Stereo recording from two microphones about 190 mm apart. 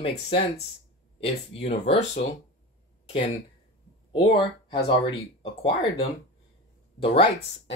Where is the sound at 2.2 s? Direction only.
60° left (ahead or behind).